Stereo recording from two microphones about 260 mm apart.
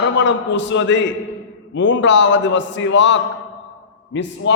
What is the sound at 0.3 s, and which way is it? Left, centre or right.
A man's voice, left.